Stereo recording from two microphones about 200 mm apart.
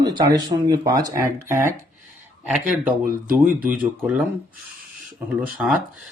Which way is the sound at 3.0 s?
45° right (ahead or behind).